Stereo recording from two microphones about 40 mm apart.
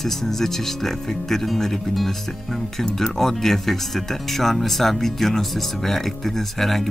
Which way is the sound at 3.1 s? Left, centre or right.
Centre.